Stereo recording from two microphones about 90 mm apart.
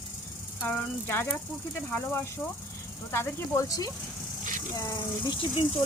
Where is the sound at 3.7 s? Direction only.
40° left (ahead or behind).